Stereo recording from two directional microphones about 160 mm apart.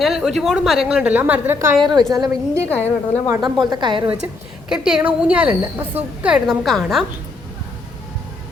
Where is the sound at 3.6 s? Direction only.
25° right (ahead or behind).